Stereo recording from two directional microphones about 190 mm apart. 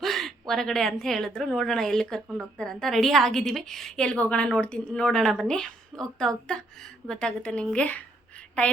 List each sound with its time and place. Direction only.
0.0 s a woman's voice: centre (ahead or behind)